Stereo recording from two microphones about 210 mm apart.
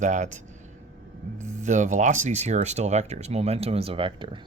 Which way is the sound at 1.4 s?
35° right (ahead or behind).